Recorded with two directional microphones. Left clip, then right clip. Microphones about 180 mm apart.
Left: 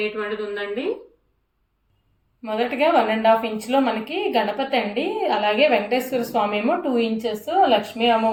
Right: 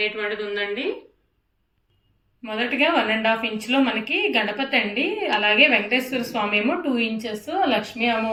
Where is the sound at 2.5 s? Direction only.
30° left (ahead or behind).